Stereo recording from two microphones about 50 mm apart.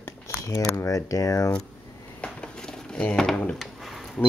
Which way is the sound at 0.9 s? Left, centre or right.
Left.